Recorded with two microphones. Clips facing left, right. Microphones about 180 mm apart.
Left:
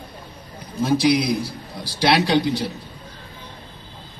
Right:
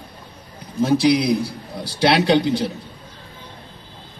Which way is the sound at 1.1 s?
30° right (ahead or behind).